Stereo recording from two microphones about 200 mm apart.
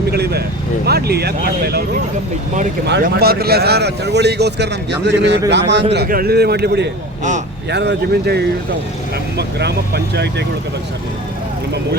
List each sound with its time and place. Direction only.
0.1 s vehicle: 55° right (ahead or behind)
0.9 s a man's voice: 50° right (ahead or behind)
2.8 s speech: 55° right (ahead or behind)
5.9 s a man's voice: 50° right (ahead or behind)